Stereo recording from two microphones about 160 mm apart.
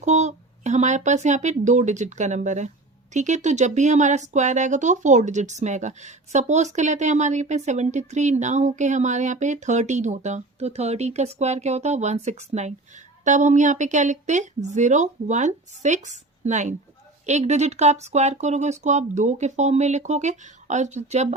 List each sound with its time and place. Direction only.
0.0 s speech: 45° right (ahead or behind)